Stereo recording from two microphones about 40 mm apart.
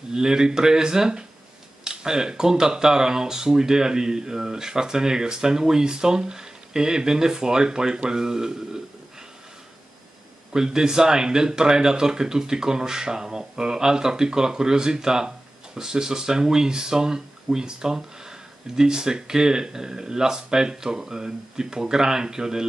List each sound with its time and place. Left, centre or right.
0.1 s speech: centre
10.5 s speech: centre